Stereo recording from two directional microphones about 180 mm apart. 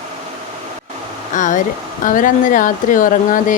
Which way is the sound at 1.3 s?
45° left (ahead or behind).